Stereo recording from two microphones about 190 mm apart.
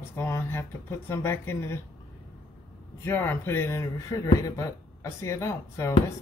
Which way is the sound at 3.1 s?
10° left (ahead or behind).